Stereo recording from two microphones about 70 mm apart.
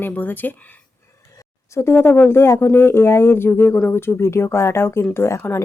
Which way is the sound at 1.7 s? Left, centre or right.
Left.